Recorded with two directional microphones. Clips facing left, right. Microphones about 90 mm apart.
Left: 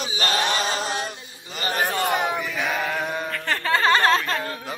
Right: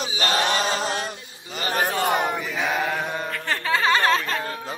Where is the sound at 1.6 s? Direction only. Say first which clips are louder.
Right 1 dB; 5° right (ahead or behind).